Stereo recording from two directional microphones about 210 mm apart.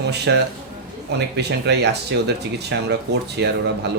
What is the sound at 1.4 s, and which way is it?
A man's voice, 55° right (ahead or behind).